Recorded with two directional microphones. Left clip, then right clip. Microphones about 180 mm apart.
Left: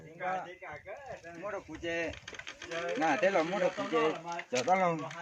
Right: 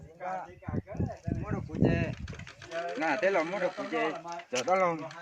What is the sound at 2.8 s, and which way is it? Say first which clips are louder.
Speech: even; 65° left (ahead or behind).